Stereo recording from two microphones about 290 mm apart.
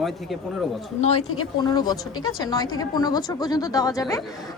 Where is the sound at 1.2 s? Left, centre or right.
Left.